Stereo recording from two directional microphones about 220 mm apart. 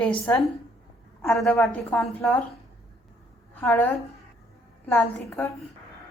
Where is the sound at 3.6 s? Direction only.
10° left (ahead or behind).